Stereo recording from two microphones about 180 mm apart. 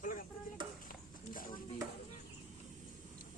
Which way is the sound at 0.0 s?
50° left (ahead or behind).